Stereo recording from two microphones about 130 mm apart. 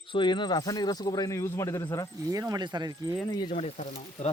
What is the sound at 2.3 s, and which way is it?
Speech, 25° right (ahead or behind).